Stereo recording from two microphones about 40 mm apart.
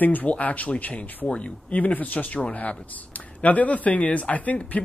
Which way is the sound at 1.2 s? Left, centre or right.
Left.